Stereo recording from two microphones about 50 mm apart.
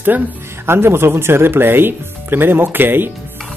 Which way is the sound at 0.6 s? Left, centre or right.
Right.